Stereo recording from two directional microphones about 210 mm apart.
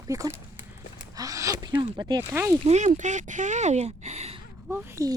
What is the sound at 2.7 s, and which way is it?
Speech, 35° right (ahead or behind).